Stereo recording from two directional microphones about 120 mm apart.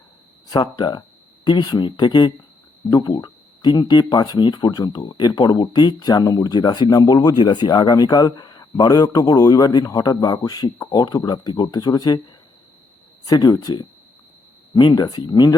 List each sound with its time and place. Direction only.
0.4 s speech: 35° left (ahead or behind)
13.2 s speech: 35° left (ahead or behind)